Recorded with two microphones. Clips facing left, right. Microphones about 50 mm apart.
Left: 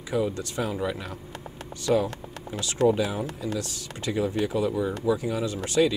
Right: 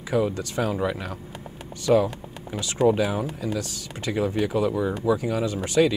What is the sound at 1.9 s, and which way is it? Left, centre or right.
Speech, centre.